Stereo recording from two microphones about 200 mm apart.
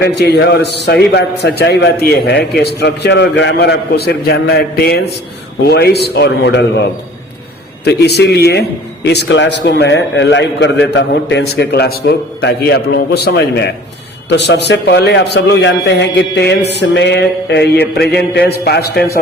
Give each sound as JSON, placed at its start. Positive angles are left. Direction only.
{"t": 0.0, "sound": "a man's voice", "side_deg": 55}
{"t": 7.9, "sound": "a man's voice", "side_deg": 55}